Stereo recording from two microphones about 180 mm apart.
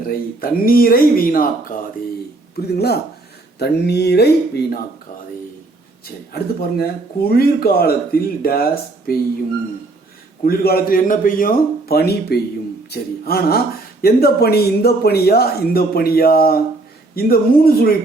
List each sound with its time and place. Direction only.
0.1 s speech: 55° left (ahead or behind)
2.6 s speech: 65° left (ahead or behind)
6.3 s speech: 55° left (ahead or behind)
10.4 s speech: 55° left (ahead or behind)